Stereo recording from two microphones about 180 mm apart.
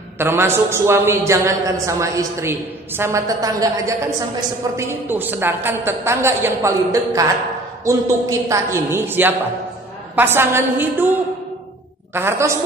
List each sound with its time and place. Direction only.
0.2 s a woman's voice: 15° right (ahead or behind)
12.1 s a woman's voice: 15° right (ahead or behind)